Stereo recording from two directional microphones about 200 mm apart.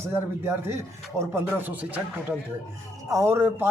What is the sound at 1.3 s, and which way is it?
Speech, 10° right (ahead or behind).